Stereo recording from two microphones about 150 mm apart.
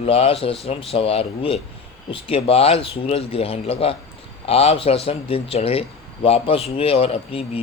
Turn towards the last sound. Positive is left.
turn(degrees=40)  # may be behind; listen again after turning